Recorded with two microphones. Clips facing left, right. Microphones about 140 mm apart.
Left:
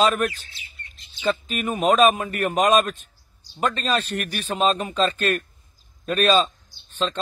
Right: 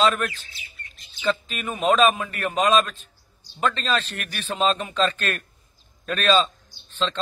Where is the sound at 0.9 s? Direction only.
25° left (ahead or behind); by 3.0 s 45° left (ahead or behind).